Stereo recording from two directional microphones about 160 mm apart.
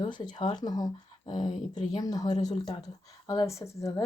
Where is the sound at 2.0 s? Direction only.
25° left (ahead or behind).